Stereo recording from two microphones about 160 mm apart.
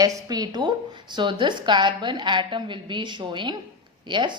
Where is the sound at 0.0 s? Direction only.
25° right (ahead or behind).